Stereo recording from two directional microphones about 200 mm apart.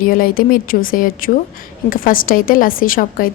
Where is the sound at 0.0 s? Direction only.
45° left (ahead or behind).